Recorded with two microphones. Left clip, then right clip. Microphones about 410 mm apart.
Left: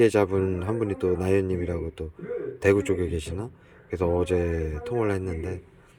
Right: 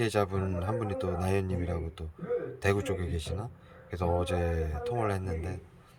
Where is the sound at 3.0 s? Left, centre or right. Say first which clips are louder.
Left 8 dB; centre.